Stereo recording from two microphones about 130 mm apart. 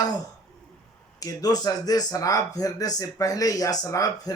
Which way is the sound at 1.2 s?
30° left (ahead or behind).